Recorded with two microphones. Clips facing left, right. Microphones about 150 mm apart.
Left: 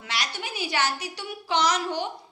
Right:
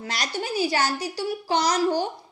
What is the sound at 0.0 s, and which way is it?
A woman's voice, 40° right (ahead or behind).